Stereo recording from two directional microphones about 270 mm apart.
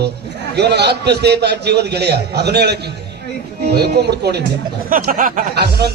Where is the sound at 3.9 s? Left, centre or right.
Right.